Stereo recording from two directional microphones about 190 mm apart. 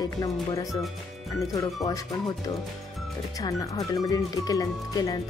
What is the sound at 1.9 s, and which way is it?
Speech, 20° left (ahead or behind).